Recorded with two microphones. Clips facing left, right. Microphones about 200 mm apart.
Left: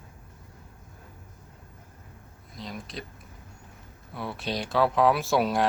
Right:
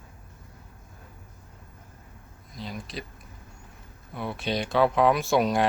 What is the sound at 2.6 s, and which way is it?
Speech, centre (ahead or behind).